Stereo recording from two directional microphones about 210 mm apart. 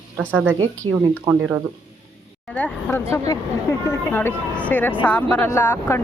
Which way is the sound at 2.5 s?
5° left (ahead or behind).